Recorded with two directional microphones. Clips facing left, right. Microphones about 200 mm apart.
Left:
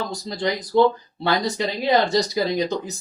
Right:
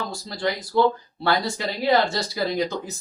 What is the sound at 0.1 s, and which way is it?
Speech, 20° left (ahead or behind).